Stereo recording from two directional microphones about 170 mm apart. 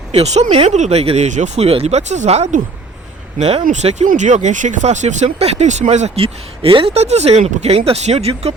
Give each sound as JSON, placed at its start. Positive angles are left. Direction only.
{"t": 0.1, "sound": "speech", "side_deg": -40}